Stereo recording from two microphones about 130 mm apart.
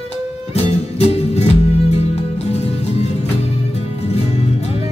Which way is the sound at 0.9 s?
50° left (ahead or behind).